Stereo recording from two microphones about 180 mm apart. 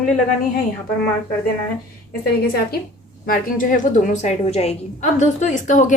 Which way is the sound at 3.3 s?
45° left (ahead or behind).